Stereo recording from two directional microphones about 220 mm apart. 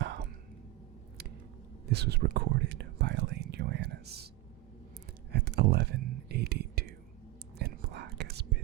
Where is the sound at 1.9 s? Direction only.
50° right (ahead or behind).